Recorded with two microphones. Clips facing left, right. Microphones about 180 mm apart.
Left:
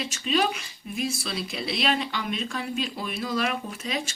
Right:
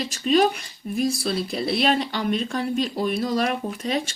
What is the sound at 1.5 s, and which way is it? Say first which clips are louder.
Speech: right 4 dB; 45° right (ahead or behind).